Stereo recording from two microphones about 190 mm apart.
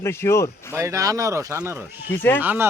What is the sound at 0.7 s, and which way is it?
A man's voice, 15° right (ahead or behind).